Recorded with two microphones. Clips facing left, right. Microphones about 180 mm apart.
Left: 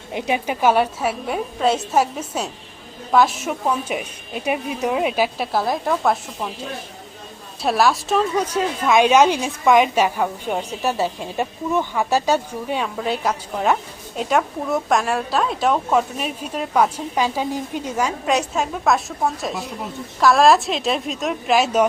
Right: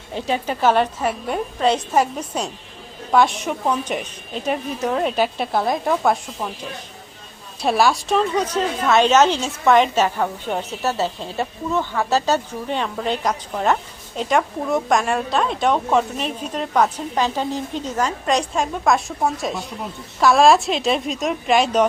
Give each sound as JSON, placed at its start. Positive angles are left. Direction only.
{"t": 0.1, "sound": "a woman's voice", "side_deg": 15}
{"t": 7.6, "sound": "a woman's voice", "side_deg": 0}